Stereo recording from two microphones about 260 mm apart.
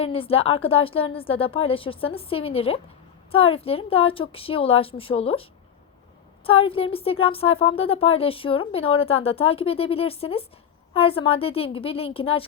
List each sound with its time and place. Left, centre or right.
0.0 s speech: left